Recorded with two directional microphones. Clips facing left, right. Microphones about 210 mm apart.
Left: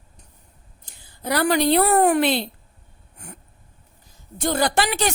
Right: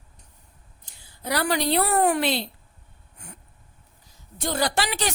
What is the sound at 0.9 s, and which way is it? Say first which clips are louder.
A woman's voice: left 3 dB; 55° left (ahead or behind).